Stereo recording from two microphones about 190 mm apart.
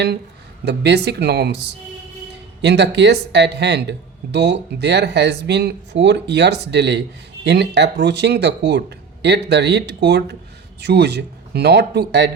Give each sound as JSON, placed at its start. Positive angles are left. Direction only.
{"t": 0.6, "sound": "speech", "side_deg": -65}